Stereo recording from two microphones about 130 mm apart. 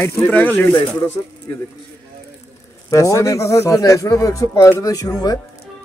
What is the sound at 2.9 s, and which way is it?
Speech, 25° left (ahead or behind).